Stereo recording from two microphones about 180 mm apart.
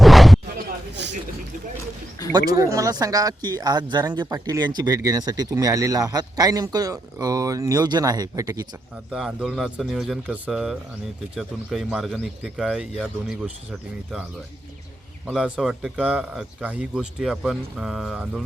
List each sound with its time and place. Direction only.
0.0 s zipper: centre (ahead or behind)
2.3 s a man's voice: 20° right (ahead or behind)
9.1 s speech: centre (ahead or behind)
15.3 s speech: 5° right (ahead or behind)